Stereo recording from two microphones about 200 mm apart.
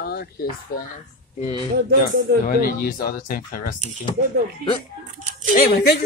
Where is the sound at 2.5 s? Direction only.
45° left (ahead or behind).